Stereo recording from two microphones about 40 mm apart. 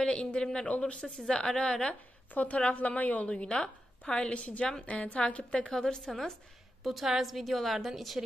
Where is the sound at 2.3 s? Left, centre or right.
Left.